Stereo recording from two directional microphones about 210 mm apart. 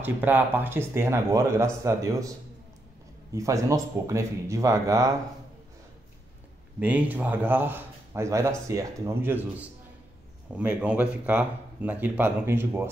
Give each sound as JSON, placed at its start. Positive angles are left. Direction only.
{"t": 0.0, "sound": "speech", "side_deg": -10}
{"t": 6.8, "sound": "speech", "side_deg": -10}